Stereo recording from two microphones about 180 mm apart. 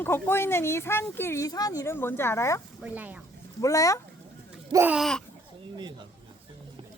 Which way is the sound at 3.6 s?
20° left (ahead or behind).